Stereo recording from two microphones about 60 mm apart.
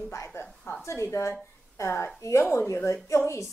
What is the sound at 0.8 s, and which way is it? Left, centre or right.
Speech, left.